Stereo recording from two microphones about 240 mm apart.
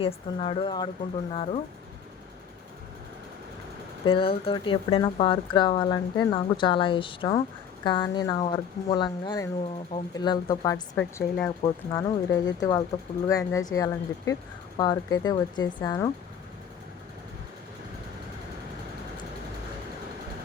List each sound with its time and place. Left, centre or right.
0.0 s speech: left
4.0 s speech: left